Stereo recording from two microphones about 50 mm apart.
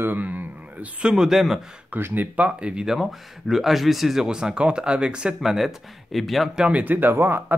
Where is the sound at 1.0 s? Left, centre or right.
Centre.